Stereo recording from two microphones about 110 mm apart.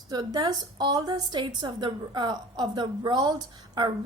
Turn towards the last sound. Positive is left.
turn(degrees=-40)  # may be behind; listen again after turning